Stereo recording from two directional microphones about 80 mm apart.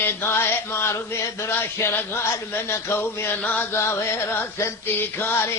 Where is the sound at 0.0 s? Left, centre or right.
Left.